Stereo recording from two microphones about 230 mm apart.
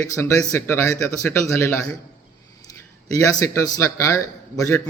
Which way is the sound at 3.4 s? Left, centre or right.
Centre.